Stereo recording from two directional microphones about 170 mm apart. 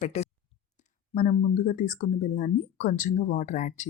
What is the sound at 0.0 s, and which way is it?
Speech, 40° left (ahead or behind).